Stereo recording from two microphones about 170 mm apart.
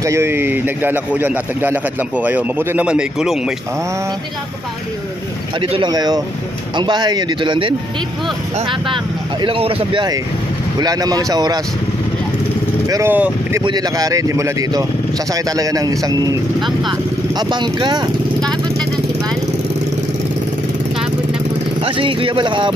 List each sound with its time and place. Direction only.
0.0 s a man's voice: 15° right (ahead or behind)
5.6 s speech: 30° right (ahead or behind)
10.8 s speech: 20° right (ahead or behind)
12.8 s a man's voice: 15° right (ahead or behind)
13.7 s speech: 20° right (ahead or behind)
17.4 s speech: 25° right (ahead or behind)
21.8 s speech: 30° right (ahead or behind)